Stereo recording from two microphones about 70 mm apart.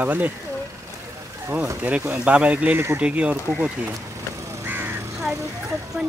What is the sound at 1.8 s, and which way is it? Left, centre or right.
Speech, right.